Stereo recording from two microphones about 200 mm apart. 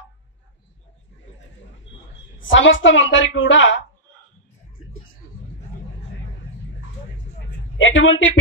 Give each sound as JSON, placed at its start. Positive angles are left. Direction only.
{"t": 2.5, "sound": "a woman's voice", "side_deg": 70}
{"t": 7.7, "sound": "a woman's voice", "side_deg": 70}